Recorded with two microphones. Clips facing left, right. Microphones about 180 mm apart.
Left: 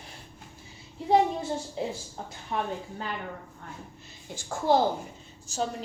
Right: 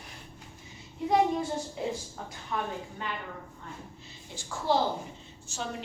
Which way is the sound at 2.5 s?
30° left (ahead or behind).